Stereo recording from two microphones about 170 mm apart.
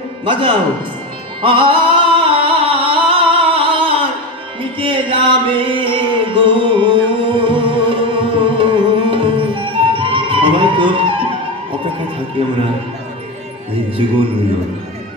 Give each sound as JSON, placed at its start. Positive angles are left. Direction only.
{"t": 0.2, "sound": "speech", "side_deg": -30}
{"t": 1.4, "sound": "music", "side_deg": -30}